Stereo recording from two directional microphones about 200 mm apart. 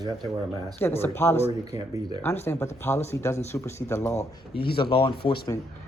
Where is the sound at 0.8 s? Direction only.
10° left (ahead or behind).